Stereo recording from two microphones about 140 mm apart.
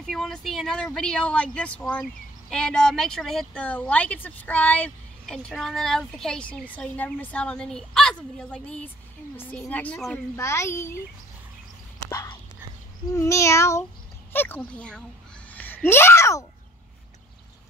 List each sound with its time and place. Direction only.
0.0 s speech: 5° left (ahead or behind)
10.1 s a child's voice: 20° left (ahead or behind)
12.1 s a child's voice: 25° left (ahead or behind)